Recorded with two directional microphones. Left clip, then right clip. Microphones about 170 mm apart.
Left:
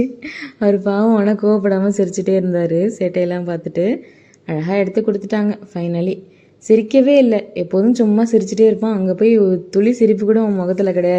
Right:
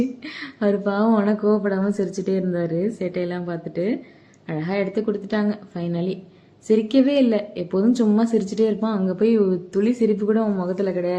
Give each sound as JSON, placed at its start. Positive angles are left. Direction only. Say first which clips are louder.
{"t": 0.3, "sound": "a woman's voice", "louder": "left 7 dB", "side_deg": 20}